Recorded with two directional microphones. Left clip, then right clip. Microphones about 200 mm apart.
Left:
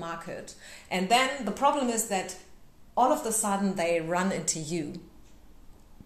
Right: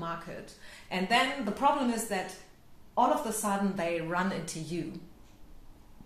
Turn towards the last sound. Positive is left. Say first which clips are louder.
# left 5 dB
turn(degrees=40)  # may be behind; listen again after turning